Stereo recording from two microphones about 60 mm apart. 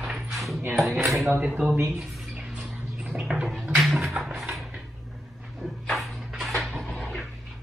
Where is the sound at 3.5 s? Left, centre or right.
Centre.